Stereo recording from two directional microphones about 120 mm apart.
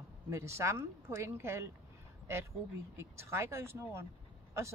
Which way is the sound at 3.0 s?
20° right (ahead or behind).